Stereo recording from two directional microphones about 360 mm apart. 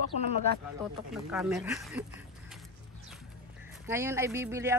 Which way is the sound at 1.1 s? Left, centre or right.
Centre.